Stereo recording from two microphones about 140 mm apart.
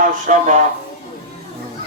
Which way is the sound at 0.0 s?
65° right (ahead or behind).